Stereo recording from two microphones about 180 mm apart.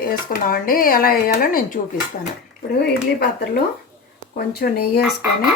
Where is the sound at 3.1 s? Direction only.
60° left (ahead or behind).